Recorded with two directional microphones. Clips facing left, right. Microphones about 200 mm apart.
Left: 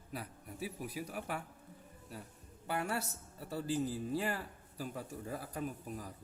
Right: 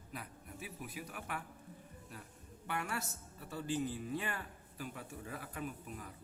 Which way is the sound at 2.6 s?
35° left (ahead or behind).